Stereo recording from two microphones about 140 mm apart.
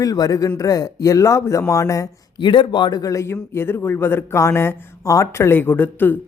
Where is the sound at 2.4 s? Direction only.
35° left (ahead or behind).